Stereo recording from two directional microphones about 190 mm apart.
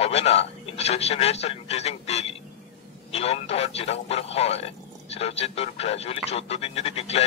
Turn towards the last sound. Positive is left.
turn(degrees=30)  # may be behind; listen again after turning